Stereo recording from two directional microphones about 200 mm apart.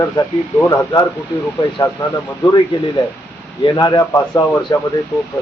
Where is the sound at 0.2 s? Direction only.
20° left (ahead or behind).